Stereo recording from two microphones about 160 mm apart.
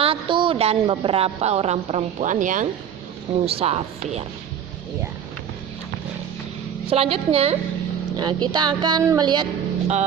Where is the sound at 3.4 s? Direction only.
40° right (ahead or behind).